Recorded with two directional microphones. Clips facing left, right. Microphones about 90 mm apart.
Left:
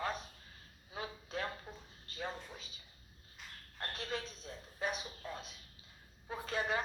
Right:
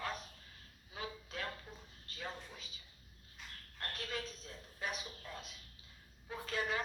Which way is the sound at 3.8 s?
25° left (ahead or behind).